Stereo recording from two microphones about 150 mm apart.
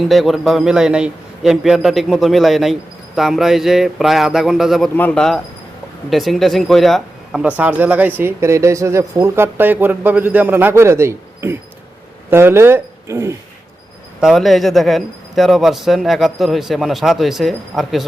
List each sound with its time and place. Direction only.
0.0 s speech: centre (ahead or behind)
4.9 s speech: 10° left (ahead or behind); by 13.3 s 20° right (ahead or behind)
14.2 s speech: centre (ahead or behind)